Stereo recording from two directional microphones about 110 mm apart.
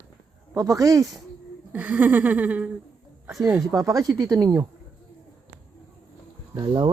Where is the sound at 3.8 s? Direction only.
35° right (ahead or behind).